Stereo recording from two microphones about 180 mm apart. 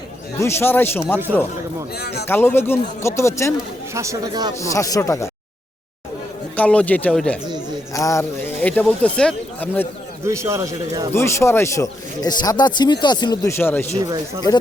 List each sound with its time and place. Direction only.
0.3 s speech: 15° left (ahead or behind)
2.0 s speech: 65° left (ahead or behind)
2.2 s speech: 10° left (ahead or behind)
3.9 s speech: 15° right (ahead or behind)
4.6 s speech: 15° left (ahead or behind)
6.6 s speech: 5° left (ahead or behind)
7.9 s speech: 15° left (ahead or behind)
10.2 s a man's voice: 15° right (ahead or behind)
11.1 s speech: 15° left (ahead or behind)
13.9 s speech: 20° right (ahead or behind)